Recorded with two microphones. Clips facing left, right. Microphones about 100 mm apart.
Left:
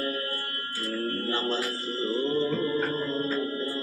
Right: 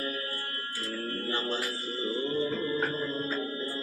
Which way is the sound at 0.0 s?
50° left (ahead or behind).